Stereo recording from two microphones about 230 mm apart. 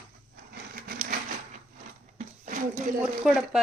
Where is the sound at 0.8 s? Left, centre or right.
Right.